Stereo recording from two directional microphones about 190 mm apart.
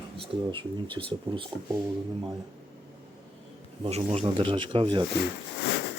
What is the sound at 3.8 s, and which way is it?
Speech, 30° right (ahead or behind).